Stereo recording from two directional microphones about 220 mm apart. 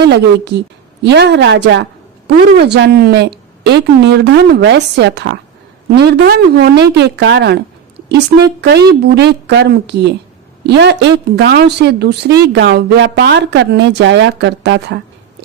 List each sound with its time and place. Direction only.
0.1 s a woman's voice: 50° right (ahead or behind)